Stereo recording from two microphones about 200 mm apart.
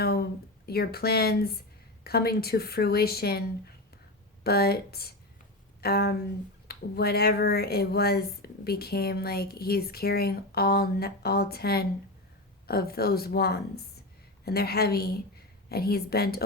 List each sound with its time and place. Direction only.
0.0 s speech: 50° left (ahead or behind)
4.4 s speech: 50° left (ahead or behind)